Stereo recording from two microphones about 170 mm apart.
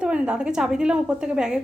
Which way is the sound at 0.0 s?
5° right (ahead or behind).